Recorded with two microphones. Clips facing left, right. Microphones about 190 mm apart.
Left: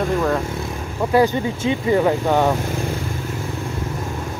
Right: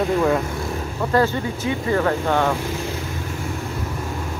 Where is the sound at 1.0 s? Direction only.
15° left (ahead or behind).